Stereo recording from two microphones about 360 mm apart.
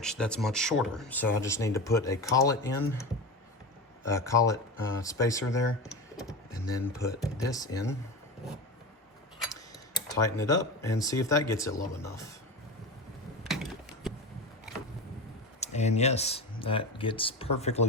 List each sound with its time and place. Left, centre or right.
0.0 s speech: centre
4.3 s speech: centre
9.5 s speech: centre
13.5 s a sound: centre
15.6 s speech: centre